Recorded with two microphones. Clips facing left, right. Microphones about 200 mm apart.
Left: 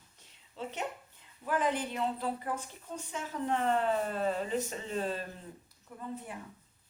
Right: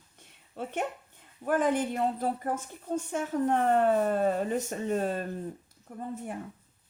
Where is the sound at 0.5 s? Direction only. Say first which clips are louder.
Right 5 dB; 55° right (ahead or behind).